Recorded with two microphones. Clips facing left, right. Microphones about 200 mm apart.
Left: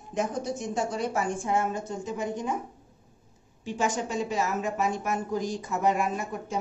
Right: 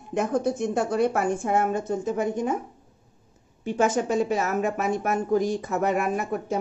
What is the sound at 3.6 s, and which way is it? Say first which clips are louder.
Speech: right 6 dB; 60° right (ahead or behind).